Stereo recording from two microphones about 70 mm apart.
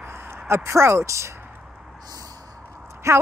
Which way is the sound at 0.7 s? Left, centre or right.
Right.